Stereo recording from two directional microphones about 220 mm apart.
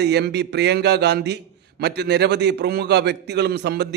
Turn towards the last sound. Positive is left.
turn(degrees=-50)  # may be behind; listen again after turning